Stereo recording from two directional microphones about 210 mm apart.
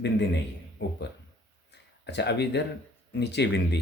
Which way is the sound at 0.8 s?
50° left (ahead or behind).